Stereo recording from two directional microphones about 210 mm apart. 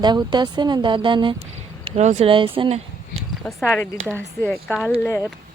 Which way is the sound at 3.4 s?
10° left (ahead or behind).